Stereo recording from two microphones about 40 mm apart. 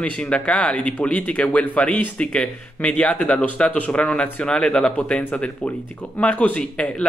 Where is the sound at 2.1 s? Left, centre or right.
Left.